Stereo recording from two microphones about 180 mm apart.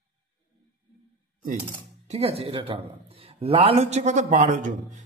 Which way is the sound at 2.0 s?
35° right (ahead or behind).